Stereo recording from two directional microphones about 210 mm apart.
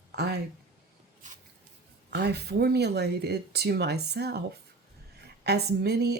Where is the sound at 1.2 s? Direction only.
35° right (ahead or behind).